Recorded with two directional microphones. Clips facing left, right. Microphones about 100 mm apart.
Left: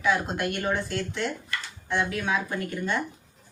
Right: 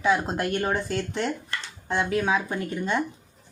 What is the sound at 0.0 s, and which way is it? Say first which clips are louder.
Speech: right 2 dB; 30° right (ahead or behind).